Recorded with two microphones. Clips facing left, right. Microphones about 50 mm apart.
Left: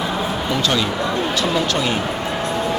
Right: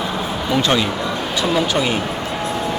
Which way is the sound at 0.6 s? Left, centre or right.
Right.